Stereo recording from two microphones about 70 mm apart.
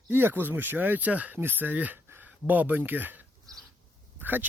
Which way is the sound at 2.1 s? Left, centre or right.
Right.